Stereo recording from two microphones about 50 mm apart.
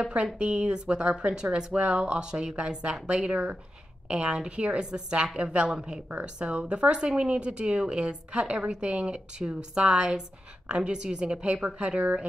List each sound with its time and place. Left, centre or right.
0.1 s speech: right